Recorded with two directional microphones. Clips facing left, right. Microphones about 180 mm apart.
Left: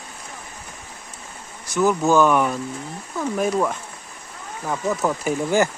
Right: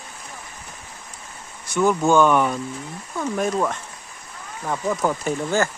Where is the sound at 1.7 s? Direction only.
5° left (ahead or behind).